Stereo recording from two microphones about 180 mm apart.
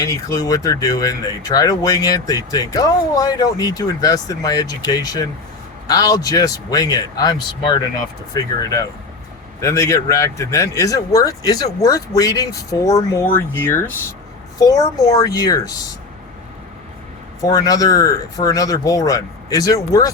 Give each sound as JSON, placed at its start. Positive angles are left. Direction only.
{"t": 0.0, "sound": "speech", "side_deg": 15}
{"t": 17.4, "sound": "speech", "side_deg": 20}